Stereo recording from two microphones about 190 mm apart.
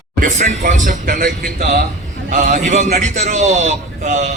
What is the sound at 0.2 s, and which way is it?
A man's voice, 40° right (ahead or behind).